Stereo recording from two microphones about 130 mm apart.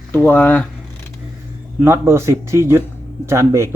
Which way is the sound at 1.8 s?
20° right (ahead or behind).